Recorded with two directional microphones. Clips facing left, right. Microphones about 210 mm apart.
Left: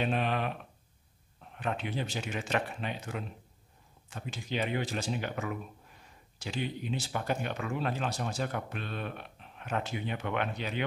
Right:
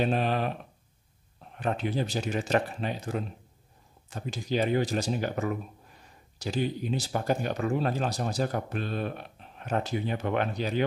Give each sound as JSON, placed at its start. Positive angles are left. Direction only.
{"t": 0.0, "sound": "speech", "side_deg": -35}
{"t": 1.6, "sound": "speech", "side_deg": -40}